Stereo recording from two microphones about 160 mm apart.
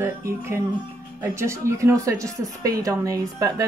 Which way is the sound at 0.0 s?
15° right (ahead or behind).